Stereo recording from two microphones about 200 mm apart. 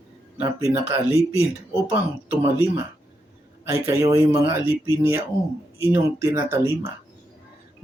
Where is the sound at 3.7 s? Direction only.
15° right (ahead or behind).